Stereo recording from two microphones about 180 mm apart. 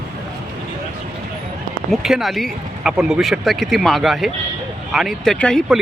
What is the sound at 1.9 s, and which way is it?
Speech, centre (ahead or behind).